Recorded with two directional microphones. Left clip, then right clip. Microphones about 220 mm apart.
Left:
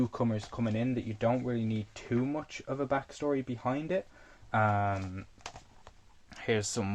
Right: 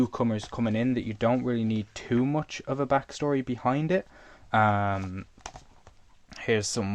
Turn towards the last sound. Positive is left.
turn(degrees=-20)  # may be behind; listen again after turning